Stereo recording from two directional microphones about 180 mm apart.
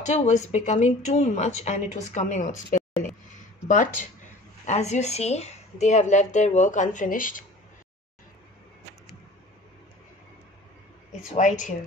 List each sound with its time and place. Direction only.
0.0 s a woman's voice: 40° left (ahead or behind)
3.0 s a sound: 45° left (ahead or behind)
4.6 s a woman's voice: 40° left (ahead or behind)
11.3 s speech: 45° left (ahead or behind)